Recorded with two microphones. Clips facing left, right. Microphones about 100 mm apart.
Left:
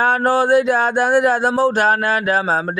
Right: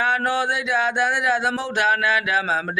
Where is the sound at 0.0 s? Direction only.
40° left (ahead or behind).